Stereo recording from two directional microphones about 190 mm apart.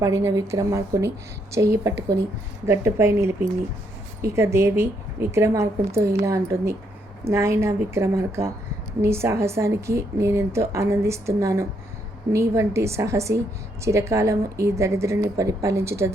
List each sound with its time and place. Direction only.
0.0 s a woman's voice: 15° right (ahead or behind)